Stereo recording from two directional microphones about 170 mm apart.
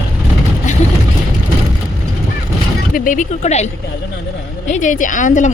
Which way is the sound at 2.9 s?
50° left (ahead or behind).